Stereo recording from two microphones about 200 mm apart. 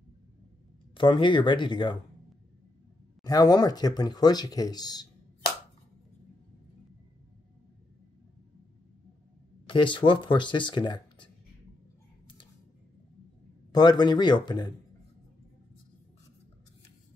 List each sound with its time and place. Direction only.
0.9 s speech: 25° left (ahead or behind)
3.3 s speech: 20° left (ahead or behind)
9.7 s speech: 25° left (ahead or behind)
13.7 s speech: 20° left (ahead or behind)